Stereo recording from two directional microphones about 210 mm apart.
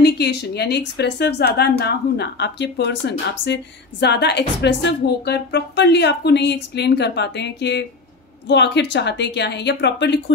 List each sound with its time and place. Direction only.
0.0 s a woman's voice: 50° left (ahead or behind)